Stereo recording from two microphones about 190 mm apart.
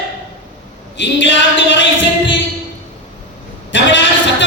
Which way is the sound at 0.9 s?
70° left (ahead or behind).